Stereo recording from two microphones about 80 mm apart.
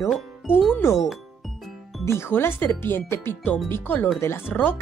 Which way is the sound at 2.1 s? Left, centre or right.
Left.